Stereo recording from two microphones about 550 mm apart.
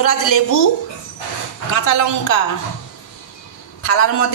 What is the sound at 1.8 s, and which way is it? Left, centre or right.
Speech, left.